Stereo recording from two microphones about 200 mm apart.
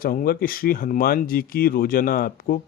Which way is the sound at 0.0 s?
45° left (ahead or behind).